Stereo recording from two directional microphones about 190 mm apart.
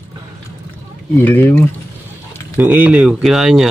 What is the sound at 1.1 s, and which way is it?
Speech, 10° left (ahead or behind).